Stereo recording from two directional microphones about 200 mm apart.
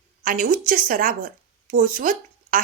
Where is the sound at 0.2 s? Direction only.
45° right (ahead or behind).